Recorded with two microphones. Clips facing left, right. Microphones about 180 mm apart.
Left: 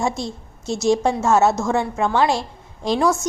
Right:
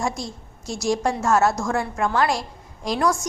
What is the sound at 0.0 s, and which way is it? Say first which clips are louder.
A woman's voice: left 4 dB; 25° left (ahead or behind).